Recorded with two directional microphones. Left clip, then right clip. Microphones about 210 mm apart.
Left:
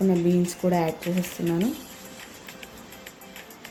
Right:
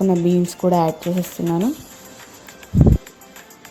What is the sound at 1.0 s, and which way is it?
Speech, 45° right (ahead or behind).